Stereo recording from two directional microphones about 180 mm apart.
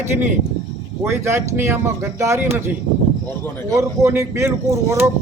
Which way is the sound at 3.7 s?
15° right (ahead or behind).